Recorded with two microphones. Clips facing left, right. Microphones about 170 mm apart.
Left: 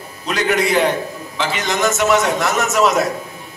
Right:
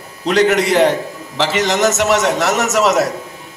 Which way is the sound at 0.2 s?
75° right (ahead or behind).